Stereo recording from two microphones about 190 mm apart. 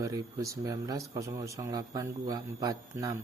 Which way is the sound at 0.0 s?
15° right (ahead or behind).